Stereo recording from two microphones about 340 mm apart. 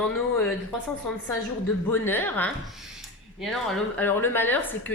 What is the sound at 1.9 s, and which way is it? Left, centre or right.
Speech, centre.